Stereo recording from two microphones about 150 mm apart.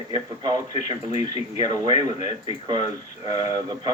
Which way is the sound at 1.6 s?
25° right (ahead or behind).